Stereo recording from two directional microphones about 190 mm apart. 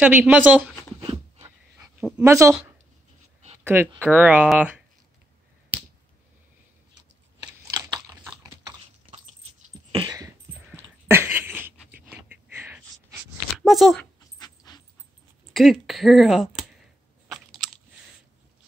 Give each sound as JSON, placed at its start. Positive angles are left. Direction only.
{"t": 0.0, "sound": "speech", "side_deg": -10}
{"t": 2.0, "sound": "speech", "side_deg": -5}
{"t": 2.2, "sound": "speech", "side_deg": -15}
{"t": 3.6, "sound": "speech", "side_deg": -10}
{"t": 7.7, "sound": "biting", "side_deg": -20}
{"t": 9.1, "sound": "dog", "side_deg": -35}
{"t": 10.0, "sound": "dog", "side_deg": -20}
{"t": 10.7, "sound": "a sound", "side_deg": -10}
{"t": 14.4, "sound": "dog", "side_deg": 20}
{"t": 15.5, "sound": "speech", "side_deg": 0}
{"t": 17.3, "sound": "biting", "side_deg": 0}